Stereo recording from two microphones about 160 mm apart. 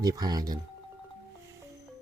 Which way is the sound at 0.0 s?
25° right (ahead or behind).